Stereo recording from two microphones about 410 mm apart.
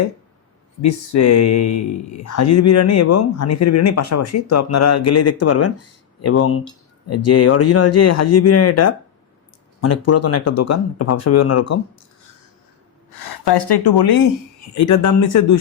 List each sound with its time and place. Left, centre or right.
0.8 s speech: left
13.1 s speech: left
14.8 s speech: left